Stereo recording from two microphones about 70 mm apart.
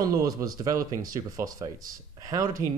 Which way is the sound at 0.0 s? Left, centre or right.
Right.